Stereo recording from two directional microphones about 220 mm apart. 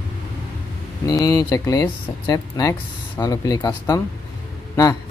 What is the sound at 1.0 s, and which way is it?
Speech, 15° left (ahead or behind).